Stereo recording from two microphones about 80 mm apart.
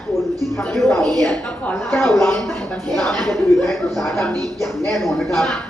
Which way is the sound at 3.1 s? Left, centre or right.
Centre.